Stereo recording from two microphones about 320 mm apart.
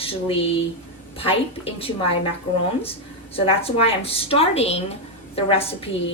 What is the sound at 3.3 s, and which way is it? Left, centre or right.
A woman's voice, centre.